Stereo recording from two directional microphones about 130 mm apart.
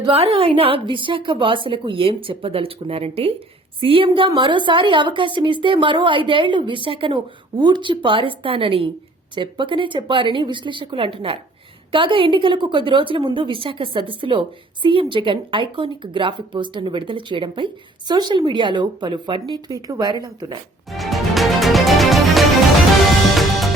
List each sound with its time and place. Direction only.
0.1 s a woman's voice: 45° right (ahead or behind)
20.9 s music: centre (ahead or behind)